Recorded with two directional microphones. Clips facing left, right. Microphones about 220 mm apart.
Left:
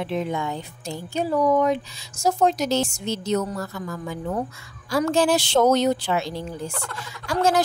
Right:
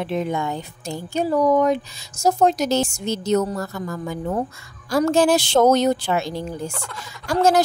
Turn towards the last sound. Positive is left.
turn(degrees=-45)  # may be behind; listen again after turning